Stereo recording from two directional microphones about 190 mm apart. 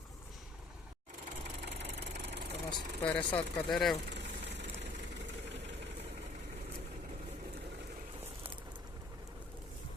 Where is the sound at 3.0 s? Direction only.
5° left (ahead or behind).